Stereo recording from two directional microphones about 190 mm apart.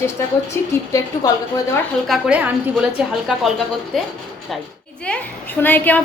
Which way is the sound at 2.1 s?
5° right (ahead or behind).